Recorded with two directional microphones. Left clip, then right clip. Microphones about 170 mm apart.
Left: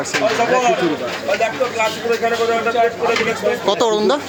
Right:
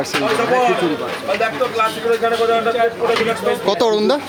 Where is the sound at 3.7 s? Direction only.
30° right (ahead or behind).